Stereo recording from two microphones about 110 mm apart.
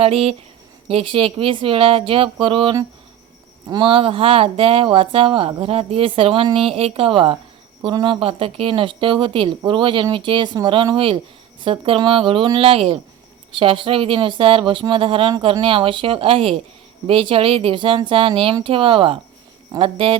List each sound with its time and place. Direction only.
0.0 s speech: 60° right (ahead or behind)